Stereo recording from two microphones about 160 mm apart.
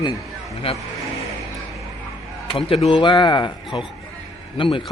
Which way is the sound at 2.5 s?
35° left (ahead or behind).